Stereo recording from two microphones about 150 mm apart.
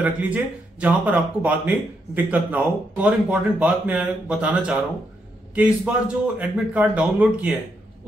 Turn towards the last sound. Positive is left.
turn(degrees=-5)  # may be behind; listen again after turning